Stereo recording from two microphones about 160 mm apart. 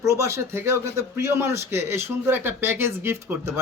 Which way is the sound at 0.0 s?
20° right (ahead or behind).